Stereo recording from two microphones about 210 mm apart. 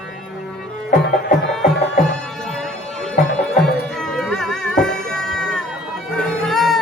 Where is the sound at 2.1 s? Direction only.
5° left (ahead or behind).